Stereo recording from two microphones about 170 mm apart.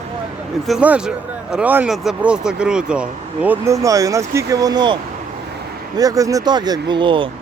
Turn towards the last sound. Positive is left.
turn(degrees=-30)  # may be behind; listen again after turning